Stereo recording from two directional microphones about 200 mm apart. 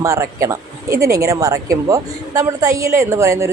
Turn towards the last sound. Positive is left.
turn(degrees=-15)  # may be behind; listen again after turning